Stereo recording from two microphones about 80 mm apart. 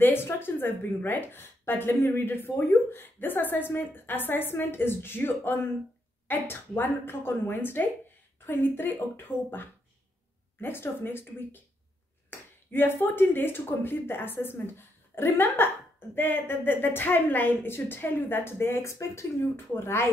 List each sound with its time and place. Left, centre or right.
0.0 s a woman's voice: left